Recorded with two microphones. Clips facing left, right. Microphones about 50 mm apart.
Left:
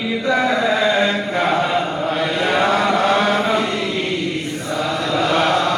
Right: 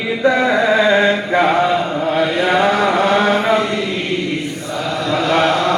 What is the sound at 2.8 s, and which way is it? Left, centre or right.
Chant, right.